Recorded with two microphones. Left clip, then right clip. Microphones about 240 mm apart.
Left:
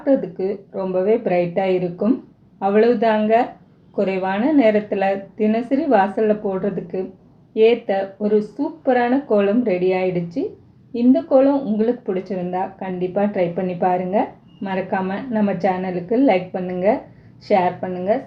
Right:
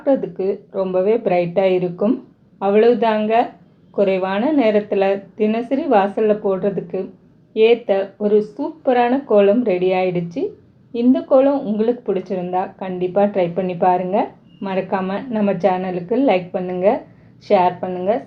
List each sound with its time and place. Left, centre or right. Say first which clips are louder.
0.0 s speech: right 1 dB; right